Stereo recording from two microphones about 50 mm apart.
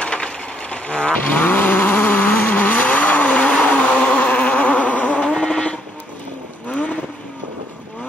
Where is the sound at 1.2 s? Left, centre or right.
Left.